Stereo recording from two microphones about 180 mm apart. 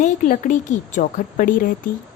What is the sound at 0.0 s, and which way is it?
A woman's voice, 45° left (ahead or behind).